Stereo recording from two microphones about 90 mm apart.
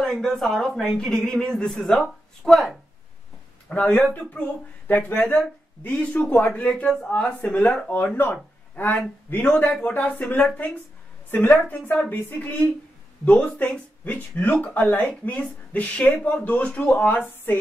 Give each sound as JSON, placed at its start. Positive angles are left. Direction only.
{"t": 0.0, "sound": "speech", "side_deg": 5}
{"t": 3.6, "sound": "speech", "side_deg": 15}
{"t": 11.2, "sound": "a woman's voice", "side_deg": 25}
{"t": 11.9, "sound": "music", "side_deg": 20}
{"t": 13.2, "sound": "speech", "side_deg": 10}